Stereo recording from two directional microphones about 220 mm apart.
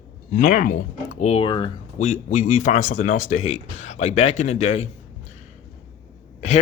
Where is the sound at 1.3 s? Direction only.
20° left (ahead or behind).